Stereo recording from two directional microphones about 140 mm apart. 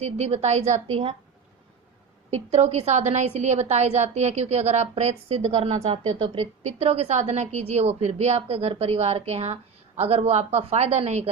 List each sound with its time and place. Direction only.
0.0 s a woman's voice: 50° right (ahead or behind)
2.3 s a woman's voice: 50° right (ahead or behind)